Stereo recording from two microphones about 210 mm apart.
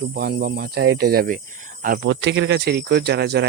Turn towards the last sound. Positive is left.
turn(degrees=-50)  # may be behind; listen again after turning